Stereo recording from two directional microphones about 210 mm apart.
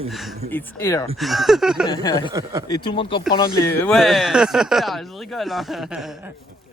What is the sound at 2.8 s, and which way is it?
Speech, 25° left (ahead or behind).